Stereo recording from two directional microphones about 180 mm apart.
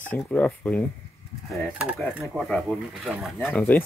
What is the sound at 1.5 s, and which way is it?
Speech, 5° right (ahead or behind).